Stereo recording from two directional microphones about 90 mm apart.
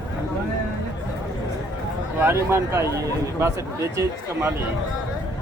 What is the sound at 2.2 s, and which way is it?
Speech, 30° right (ahead or behind).